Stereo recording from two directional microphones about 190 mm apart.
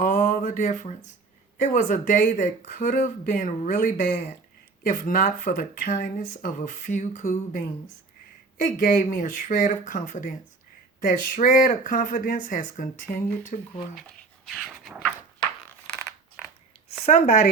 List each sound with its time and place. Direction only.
0.0 s a sound: 45° left (ahead or behind)
1.6 s speech: 40° left (ahead or behind)
8.6 s speech: 45° left (ahead or behind)
14.4 s dog: 5° right (ahead or behind)
17.1 s speech: 40° left (ahead or behind)